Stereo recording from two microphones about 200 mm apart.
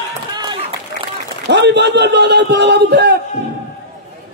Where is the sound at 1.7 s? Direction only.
60° right (ahead or behind).